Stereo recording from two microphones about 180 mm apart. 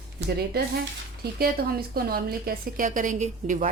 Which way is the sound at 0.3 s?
60° right (ahead or behind).